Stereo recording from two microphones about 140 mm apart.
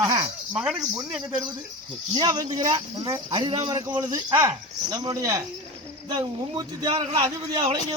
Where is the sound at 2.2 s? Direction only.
30° right (ahead or behind).